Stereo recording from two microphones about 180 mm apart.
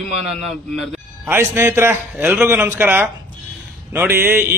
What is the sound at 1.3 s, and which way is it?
A man's voice, 15° right (ahead or behind).